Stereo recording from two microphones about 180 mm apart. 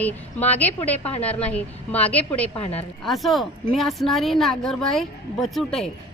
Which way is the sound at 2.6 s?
35° left (ahead or behind).